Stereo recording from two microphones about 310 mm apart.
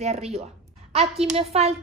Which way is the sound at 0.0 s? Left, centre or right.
Centre.